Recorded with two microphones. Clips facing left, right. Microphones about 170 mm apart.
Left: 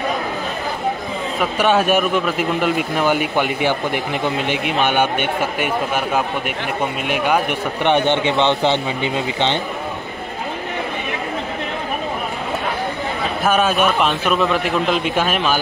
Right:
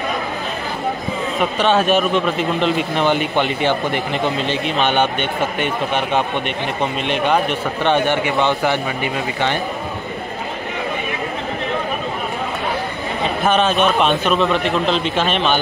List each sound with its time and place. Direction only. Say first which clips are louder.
1.6 s a man's voice: even; 10° left (ahead or behind)
13.5 s a man's voice: even; 5° left (ahead or behind)